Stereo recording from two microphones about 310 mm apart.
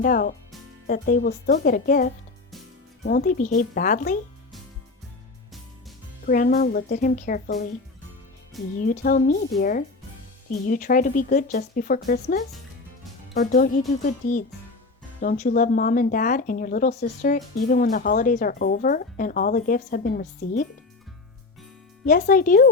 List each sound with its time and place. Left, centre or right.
0.0 s speech: left
6.2 s speech: left
8.8 s speech: left
22.0 s speech: left